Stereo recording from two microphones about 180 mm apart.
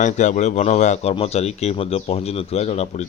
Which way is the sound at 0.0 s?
45° left (ahead or behind).